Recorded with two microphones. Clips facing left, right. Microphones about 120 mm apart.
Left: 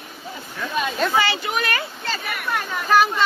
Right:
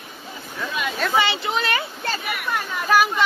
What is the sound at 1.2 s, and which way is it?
Speech, 20° right (ahead or behind).